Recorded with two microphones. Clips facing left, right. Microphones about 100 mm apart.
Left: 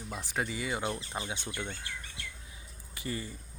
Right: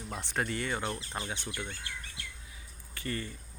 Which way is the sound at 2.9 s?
15° left (ahead or behind).